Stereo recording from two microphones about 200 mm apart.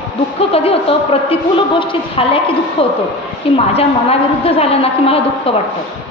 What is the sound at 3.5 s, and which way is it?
A woman's voice, 30° left (ahead or behind).